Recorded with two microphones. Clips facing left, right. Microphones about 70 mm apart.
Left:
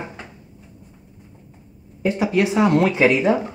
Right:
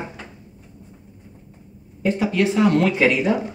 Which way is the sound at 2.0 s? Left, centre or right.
Centre.